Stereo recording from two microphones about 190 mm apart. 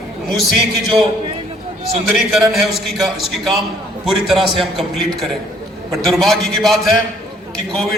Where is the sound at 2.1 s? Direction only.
Centre (ahead or behind).